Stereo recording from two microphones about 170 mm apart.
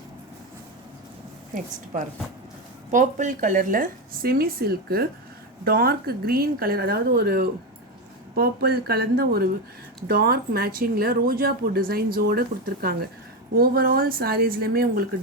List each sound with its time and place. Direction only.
2.9 s speech: 45° right (ahead or behind)